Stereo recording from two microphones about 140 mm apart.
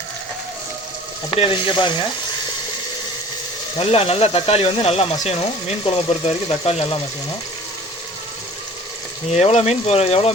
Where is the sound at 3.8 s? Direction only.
45° left (ahead or behind).